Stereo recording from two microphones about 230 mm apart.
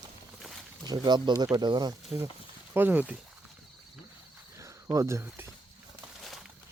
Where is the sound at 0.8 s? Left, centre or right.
Centre.